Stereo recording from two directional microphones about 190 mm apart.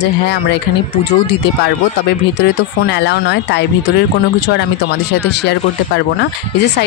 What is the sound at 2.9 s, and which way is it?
Speech, 65° left (ahead or behind).